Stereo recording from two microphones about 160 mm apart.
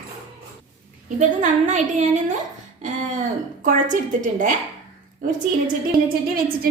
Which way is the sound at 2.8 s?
50° right (ahead or behind).